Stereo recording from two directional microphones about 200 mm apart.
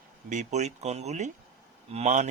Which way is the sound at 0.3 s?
35° right (ahead or behind).